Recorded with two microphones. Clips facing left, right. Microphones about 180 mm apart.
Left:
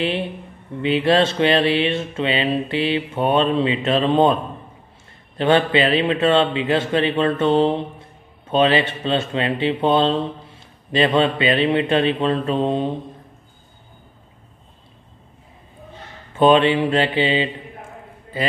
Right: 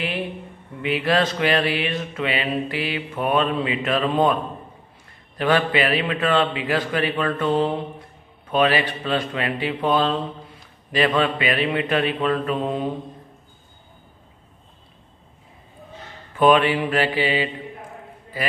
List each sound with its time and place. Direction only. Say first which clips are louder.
0.8 s speech: left 4 dB; 25° left (ahead or behind)
5.4 s speech: left 3 dB; 25° left (ahead or behind)
16.3 s speech: left 2 dB; 25° left (ahead or behind)